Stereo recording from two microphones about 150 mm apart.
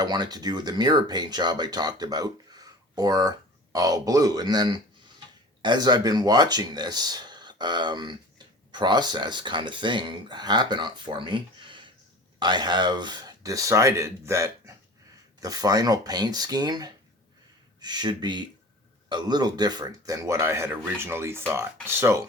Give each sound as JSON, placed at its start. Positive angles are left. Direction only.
{"t": 0.0, "sound": "speech", "side_deg": -25}